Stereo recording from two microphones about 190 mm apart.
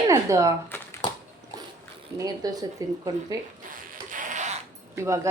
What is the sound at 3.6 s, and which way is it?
Zipper, 45° right (ahead or behind).